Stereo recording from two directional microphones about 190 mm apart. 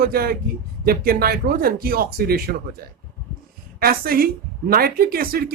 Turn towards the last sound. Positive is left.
turn(degrees=-50)  # may be behind; listen again after turning